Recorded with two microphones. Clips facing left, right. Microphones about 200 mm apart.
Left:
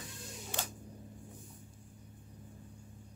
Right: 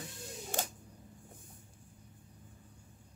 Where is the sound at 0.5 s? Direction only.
45° right (ahead or behind).